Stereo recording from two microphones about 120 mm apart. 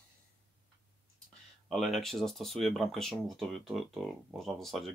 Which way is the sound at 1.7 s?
Centre (ahead or behind).